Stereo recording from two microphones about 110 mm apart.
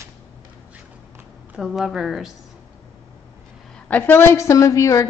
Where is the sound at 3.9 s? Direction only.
20° left (ahead or behind).